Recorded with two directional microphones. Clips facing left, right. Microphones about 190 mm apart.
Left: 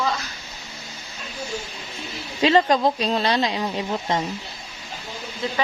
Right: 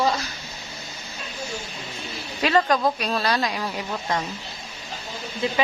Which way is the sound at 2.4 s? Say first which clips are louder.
Left 3 dB; 25° left (ahead or behind).